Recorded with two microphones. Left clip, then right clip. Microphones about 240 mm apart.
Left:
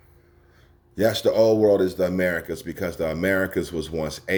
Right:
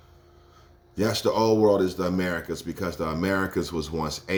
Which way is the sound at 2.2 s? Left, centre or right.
Right.